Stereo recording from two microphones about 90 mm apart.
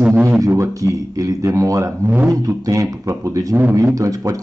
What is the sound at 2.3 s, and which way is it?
Speech, 40° right (ahead or behind).